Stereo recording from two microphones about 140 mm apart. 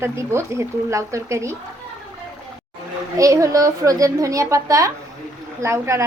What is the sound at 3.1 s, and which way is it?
A woman's voice, 25° right (ahead or behind).